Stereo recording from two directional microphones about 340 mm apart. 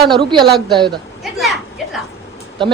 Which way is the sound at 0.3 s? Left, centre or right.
Right.